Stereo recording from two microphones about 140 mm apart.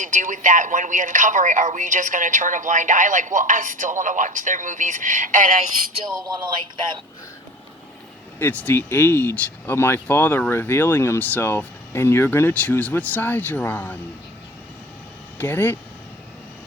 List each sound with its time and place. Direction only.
0.0 s speech: 65° right (ahead or behind)
8.4 s speech: 15° left (ahead or behind)
15.4 s speech: 15° left (ahead or behind)